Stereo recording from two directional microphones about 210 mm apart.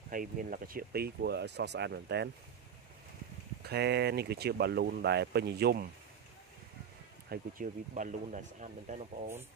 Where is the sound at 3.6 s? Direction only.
50° right (ahead or behind).